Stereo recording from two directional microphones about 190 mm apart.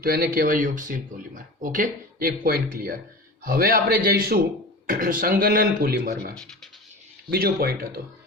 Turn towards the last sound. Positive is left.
turn(degrees=-55)  # may be behind; listen again after turning